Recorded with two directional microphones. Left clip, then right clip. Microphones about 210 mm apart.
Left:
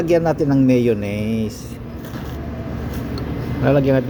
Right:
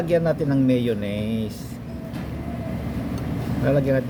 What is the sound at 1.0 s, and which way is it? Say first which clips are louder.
Speech: left 4 dB; 30° right (ahead or behind).